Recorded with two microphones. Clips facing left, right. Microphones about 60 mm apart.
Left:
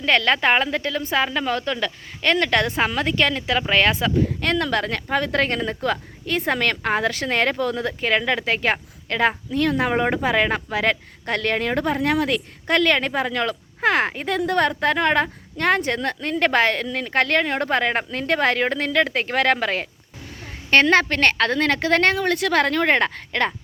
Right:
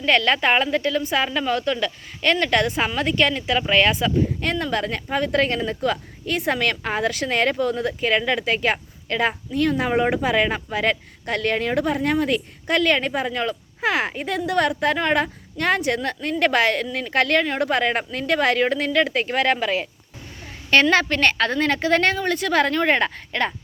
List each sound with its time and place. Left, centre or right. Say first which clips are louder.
0.0 s a woman's voice: even; left
20.9 s a woman's voice: left 1 dB; left